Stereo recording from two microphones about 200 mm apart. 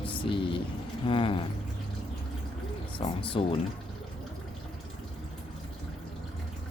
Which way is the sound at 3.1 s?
25° left (ahead or behind).